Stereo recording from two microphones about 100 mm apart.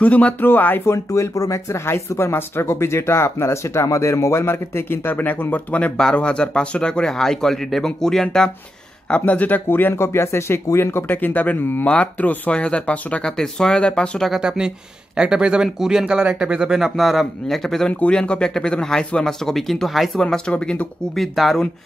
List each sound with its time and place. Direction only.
0.0 s speech: 15° left (ahead or behind)
0.9 s speech: 35° left (ahead or behind); by 14.3 s 10° left (ahead or behind)
14.3 s speech: 5° right (ahead or behind); by 20.9 s 10° left (ahead or behind)
21.1 s speech: centre (ahead or behind)